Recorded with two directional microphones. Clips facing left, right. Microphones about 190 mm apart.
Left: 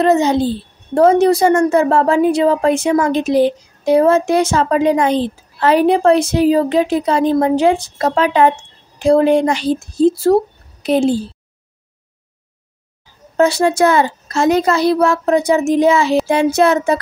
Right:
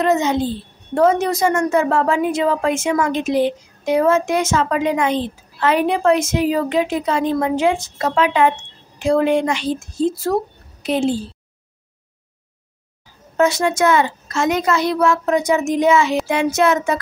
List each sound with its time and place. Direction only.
0.0 s a woman's voice: 35° left (ahead or behind)
13.4 s a woman's voice: 30° left (ahead or behind)